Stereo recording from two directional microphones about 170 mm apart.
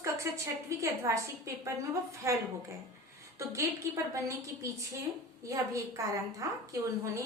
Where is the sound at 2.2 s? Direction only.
15° right (ahead or behind).